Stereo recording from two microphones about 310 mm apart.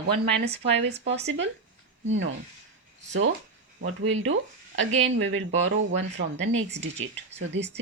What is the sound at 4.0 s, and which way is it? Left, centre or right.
Speech, right.